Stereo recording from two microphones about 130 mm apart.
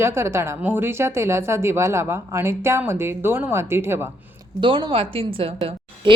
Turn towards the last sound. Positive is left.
turn(degrees=-40)  # may be behind; listen again after turning